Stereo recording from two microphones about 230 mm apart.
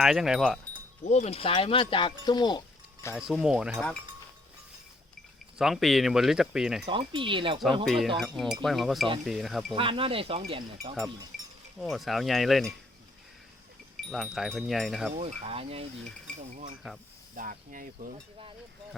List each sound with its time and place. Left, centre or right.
0.0 s speech: centre
1.0 s speech: left
3.2 s speech: centre
5.5 s speech: centre
6.8 s speech: right
7.9 s speech: centre
9.7 s speech: right
11.8 s speech: centre
13.9 s speech: centre
15.1 s speech: right